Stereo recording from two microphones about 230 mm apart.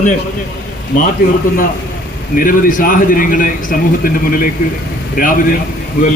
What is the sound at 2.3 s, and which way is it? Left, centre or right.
A man's voice, left.